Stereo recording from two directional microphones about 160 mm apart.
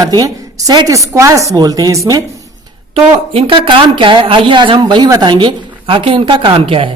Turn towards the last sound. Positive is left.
turn(degrees=-35)  # may be behind; listen again after turning